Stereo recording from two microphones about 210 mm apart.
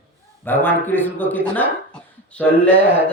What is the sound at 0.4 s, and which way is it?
Speech, 10° left (ahead or behind).